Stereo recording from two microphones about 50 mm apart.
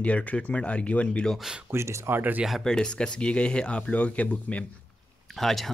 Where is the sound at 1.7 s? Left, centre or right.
Right.